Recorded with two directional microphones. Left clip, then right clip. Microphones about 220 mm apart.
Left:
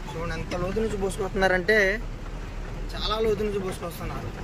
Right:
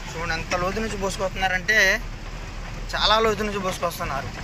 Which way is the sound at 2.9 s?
5° left (ahead or behind).